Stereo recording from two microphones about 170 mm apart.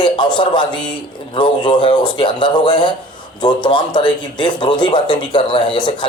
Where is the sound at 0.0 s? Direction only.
25° left (ahead or behind).